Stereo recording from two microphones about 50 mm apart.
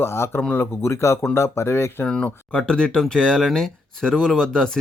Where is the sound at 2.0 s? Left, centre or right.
Centre.